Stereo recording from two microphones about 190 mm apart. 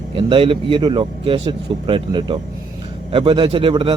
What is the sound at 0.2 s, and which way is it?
A man's voice, 30° right (ahead or behind).